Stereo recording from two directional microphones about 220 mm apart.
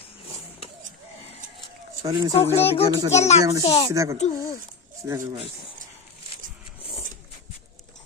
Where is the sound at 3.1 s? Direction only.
30° left (ahead or behind).